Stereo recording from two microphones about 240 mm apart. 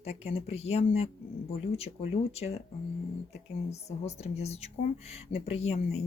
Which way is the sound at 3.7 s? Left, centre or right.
Left.